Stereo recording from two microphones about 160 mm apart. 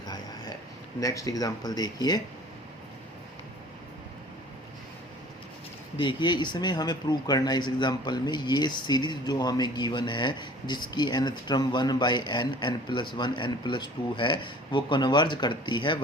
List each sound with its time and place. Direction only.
0.0 s a sound: 25° left (ahead or behind)
0.9 s speech: 20° left (ahead or behind)
6.0 s speech: 30° left (ahead or behind)